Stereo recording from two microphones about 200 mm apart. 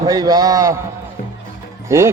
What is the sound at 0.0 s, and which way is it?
Speech, 20° right (ahead or behind).